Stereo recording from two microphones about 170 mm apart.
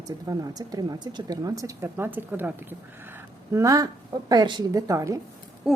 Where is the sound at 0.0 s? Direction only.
20° right (ahead or behind).